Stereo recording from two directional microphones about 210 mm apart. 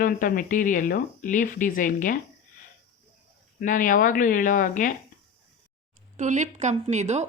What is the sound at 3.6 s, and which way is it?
Speech, 40° left (ahead or behind).